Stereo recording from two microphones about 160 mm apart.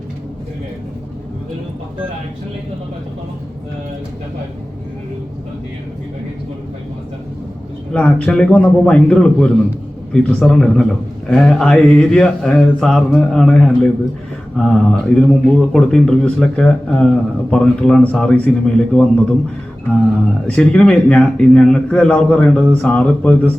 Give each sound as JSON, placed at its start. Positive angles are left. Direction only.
{"t": 7.9, "sound": "a man's voice", "side_deg": 5}
{"t": 20.5, "sound": "a man's voice", "side_deg": 5}